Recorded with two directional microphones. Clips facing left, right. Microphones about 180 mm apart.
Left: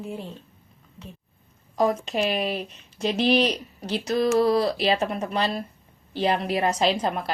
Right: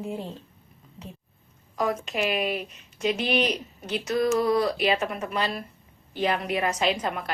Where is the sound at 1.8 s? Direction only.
30° left (ahead or behind).